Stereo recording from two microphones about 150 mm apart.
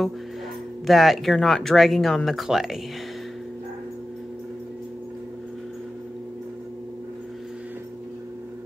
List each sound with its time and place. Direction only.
0.8 s speech: centre (ahead or behind)